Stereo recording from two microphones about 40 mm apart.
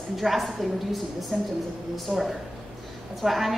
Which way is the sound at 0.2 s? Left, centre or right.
Centre.